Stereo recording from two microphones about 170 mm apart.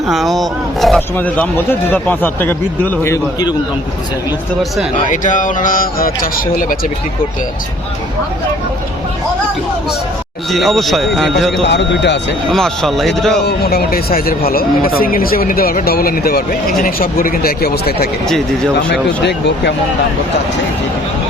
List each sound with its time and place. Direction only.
0.1 s speech: centre (ahead or behind)
5.0 s speech: 50° left (ahead or behind)
10.5 s speech: centre (ahead or behind)
11.6 s speech: 90° left
12.5 s speech: 5° left (ahead or behind)
13.4 s speech: 65° left (ahead or behind)
18.3 s speech: 5° left (ahead or behind)
19.2 s speech: 90° left